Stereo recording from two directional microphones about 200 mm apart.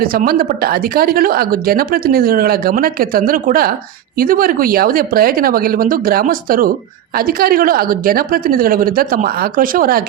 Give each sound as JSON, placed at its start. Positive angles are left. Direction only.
{"t": 0.0, "sound": "speech", "side_deg": -45}